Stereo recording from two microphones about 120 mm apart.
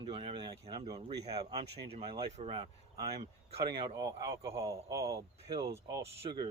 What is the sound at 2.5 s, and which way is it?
Speech, 40° right (ahead or behind).